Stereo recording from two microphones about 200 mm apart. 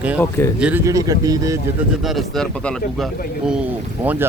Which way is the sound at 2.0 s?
Centre (ahead or behind).